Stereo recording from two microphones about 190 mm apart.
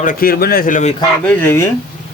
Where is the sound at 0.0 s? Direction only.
45° left (ahead or behind).